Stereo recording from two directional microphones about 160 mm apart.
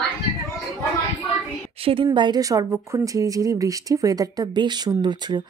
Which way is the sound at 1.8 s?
35° right (ahead or behind).